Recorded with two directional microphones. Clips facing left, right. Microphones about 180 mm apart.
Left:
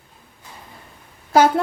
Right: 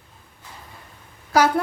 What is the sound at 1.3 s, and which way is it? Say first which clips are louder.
Speech: left 3 dB; 25° left (ahead or behind).